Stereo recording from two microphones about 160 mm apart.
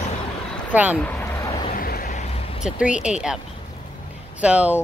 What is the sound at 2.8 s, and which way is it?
Speech, 5° right (ahead or behind).